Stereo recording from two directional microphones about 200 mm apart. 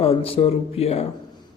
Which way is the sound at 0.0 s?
30° left (ahead or behind).